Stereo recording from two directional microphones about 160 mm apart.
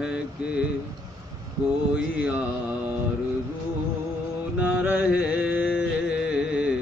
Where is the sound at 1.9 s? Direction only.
5° right (ahead or behind).